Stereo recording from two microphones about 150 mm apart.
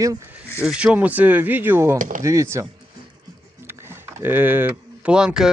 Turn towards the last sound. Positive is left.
turn(degrees=-5)  # may be behind; listen again after turning